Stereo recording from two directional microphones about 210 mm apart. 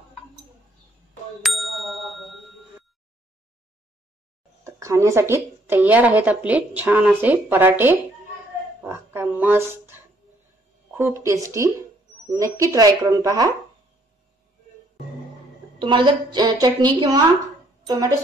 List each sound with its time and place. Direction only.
1.4 s bicycle bell: centre (ahead or behind)
4.6 s a woman's voice: 15° right (ahead or behind)
8.8 s a sound: 10° right (ahead or behind)
11.0 s a woman's voice: 10° right (ahead or behind)
15.8 s a woman's voice: 20° right (ahead or behind)